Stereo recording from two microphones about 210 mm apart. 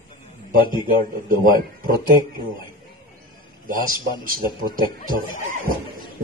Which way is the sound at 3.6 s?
40° right (ahead or behind).